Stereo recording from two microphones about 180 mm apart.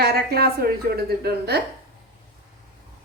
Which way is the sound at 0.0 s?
60° right (ahead or behind).